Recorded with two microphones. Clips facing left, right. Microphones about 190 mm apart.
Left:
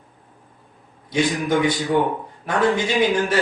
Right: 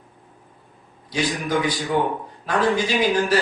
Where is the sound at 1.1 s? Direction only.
25° left (ahead or behind).